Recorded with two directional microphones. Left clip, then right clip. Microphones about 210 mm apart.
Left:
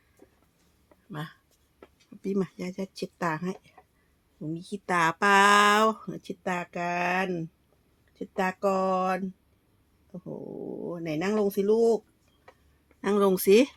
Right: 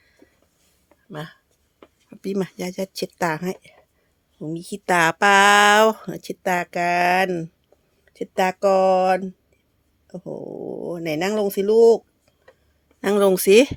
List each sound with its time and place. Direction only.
1.1 s speech: 45° right (ahead or behind)